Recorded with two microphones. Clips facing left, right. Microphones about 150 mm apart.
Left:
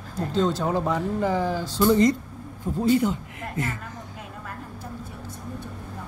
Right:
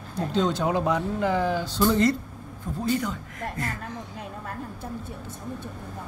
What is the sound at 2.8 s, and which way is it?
Speech, 25° left (ahead or behind).